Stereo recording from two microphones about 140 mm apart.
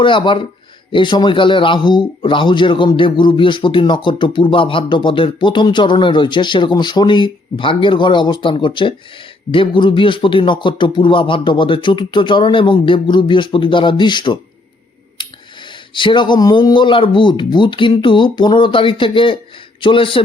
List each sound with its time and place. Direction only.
0.0 s a man's voice: 35° left (ahead or behind)
16.0 s a man's voice: 35° left (ahead or behind)